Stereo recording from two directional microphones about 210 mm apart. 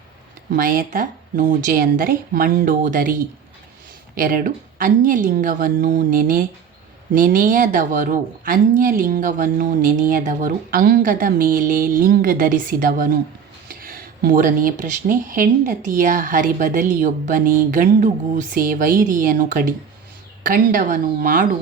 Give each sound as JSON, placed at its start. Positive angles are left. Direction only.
{"t": 0.5, "sound": "speech", "side_deg": -40}
{"t": 13.7, "sound": "a sound", "side_deg": -45}
{"t": 15.1, "sound": "speech", "side_deg": -40}